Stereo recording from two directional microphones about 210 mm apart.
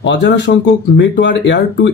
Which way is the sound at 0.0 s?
55° left (ahead or behind).